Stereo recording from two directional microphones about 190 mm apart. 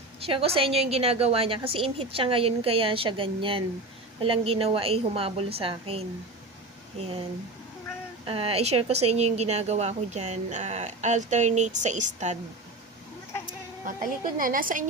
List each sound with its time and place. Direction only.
0.3 s a woman's voice: 30° right (ahead or behind)
8.3 s speech: 30° right (ahead or behind)
13.8 s a woman's voice: 45° right (ahead or behind)